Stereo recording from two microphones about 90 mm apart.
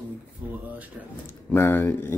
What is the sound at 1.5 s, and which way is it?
Speech, 25° left (ahead or behind).